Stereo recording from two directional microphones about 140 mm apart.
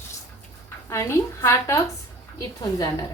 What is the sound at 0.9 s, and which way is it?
A woman's voice, 20° left (ahead or behind).